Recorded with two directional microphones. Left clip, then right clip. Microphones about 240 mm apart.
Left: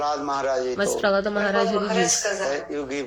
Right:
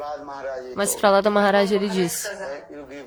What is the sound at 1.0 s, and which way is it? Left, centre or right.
Speech, right.